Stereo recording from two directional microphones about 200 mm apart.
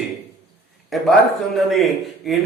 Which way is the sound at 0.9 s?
Centre (ahead or behind).